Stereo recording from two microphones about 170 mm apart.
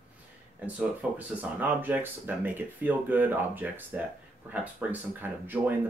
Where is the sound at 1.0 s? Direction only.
5° right (ahead or behind).